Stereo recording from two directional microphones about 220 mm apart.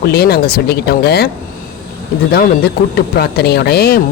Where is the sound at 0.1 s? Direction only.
45° left (ahead or behind).